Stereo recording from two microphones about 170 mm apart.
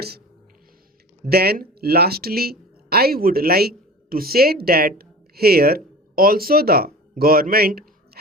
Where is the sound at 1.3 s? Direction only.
65° right (ahead or behind).